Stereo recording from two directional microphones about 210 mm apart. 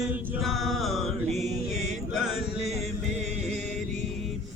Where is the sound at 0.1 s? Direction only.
5° right (ahead or behind).